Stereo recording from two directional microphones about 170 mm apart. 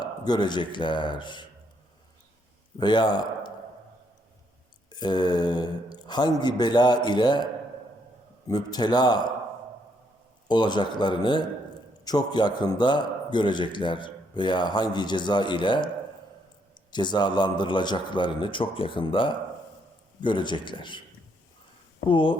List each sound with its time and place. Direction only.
0.0 s a man's voice: 25° left (ahead or behind)
2.7 s speech: 25° left (ahead or behind)
4.9 s a man's voice: 25° left (ahead or behind)
8.4 s a man's voice: 25° left (ahead or behind)
10.5 s a man's voice: 25° left (ahead or behind)
22.0 s speech: 30° left (ahead or behind)